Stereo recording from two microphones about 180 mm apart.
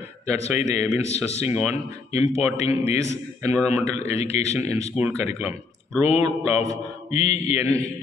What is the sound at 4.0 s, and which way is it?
Speech, 35° left (ahead or behind).